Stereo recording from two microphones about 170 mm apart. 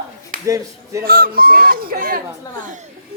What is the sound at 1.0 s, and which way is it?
Speech, 60° right (ahead or behind).